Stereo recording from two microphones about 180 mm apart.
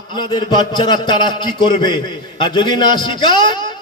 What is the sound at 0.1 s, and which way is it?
A man's voice, 25° left (ahead or behind).